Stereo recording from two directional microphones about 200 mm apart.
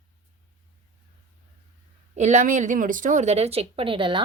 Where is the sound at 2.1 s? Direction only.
35° right (ahead or behind).